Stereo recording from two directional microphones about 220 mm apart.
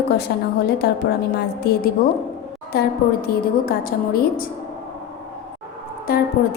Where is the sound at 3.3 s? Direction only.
45° left (ahead or behind).